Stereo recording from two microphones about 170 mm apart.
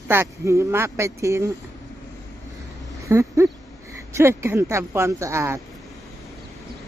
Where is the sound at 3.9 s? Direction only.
15° right (ahead or behind).